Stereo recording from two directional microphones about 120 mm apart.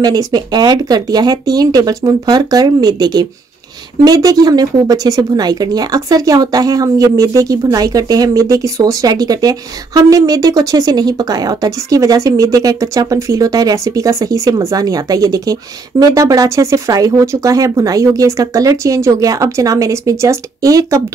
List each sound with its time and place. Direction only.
0.0 s a woman's voice: 30° right (ahead or behind)